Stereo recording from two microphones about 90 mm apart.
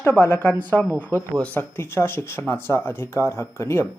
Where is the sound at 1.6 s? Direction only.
25° left (ahead or behind).